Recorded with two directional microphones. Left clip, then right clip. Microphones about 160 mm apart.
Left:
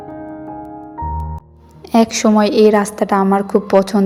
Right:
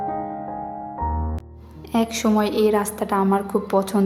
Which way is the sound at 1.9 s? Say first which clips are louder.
Left 8 dB; 30° left (ahead or behind).